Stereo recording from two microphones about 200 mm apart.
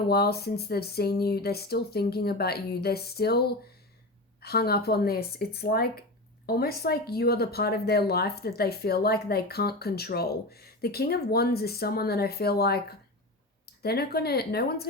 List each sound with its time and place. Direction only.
0.1 s speech: 50° left (ahead or behind)